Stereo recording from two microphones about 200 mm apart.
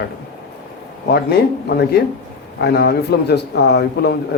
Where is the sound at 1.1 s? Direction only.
55° left (ahead or behind).